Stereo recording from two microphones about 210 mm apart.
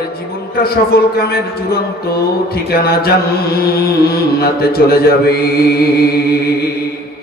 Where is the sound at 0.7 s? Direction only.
45° left (ahead or behind).